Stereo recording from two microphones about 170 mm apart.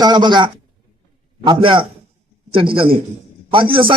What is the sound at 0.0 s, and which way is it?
A man's voice, 25° right (ahead or behind).